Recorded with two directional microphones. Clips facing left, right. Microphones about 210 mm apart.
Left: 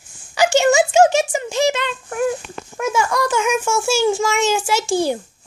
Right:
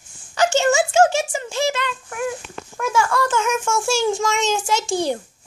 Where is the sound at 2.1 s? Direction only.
35° left (ahead or behind).